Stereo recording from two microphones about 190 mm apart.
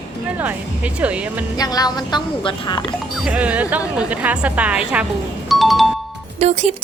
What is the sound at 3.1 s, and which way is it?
Speech, 5° right (ahead or behind).